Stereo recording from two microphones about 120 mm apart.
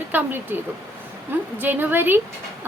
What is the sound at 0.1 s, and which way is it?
Speech, 15° right (ahead or behind).